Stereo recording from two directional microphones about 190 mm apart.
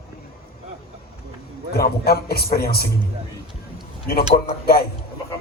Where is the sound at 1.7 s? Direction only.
55° left (ahead or behind).